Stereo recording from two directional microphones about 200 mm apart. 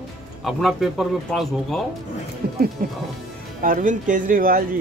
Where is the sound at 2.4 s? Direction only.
50° right (ahead or behind).